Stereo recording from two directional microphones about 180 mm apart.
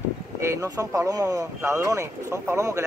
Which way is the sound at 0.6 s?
20° right (ahead or behind).